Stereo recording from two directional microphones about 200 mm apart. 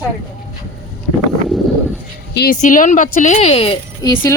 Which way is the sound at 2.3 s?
50° left (ahead or behind).